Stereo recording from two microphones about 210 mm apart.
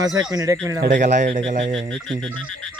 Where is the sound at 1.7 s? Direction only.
25° right (ahead or behind).